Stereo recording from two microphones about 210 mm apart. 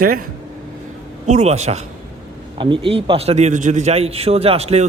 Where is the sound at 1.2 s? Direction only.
35° right (ahead or behind).